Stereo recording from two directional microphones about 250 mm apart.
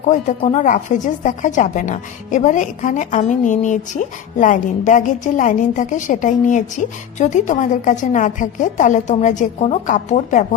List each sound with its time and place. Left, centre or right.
0.1 s a woman's voice: left